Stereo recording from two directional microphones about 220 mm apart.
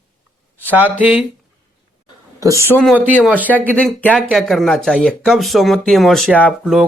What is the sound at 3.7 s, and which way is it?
Speech, 5° left (ahead or behind).